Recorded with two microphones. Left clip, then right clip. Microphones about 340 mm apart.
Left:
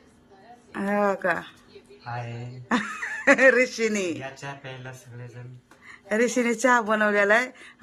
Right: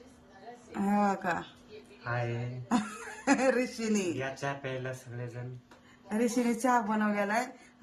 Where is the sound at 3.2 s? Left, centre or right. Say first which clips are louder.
Left 10 dB; centre.